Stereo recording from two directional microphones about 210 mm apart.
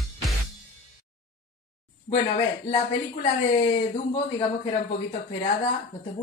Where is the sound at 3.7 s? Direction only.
30° left (ahead or behind).